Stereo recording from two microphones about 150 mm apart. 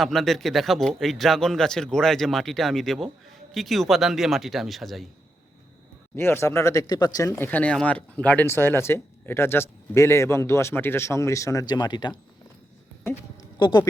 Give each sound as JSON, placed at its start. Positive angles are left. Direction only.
{"t": 0.0, "sound": "speech", "side_deg": 0}
{"t": 6.1, "sound": "speech", "side_deg": 15}
{"t": 13.6, "sound": "speech", "side_deg": 30}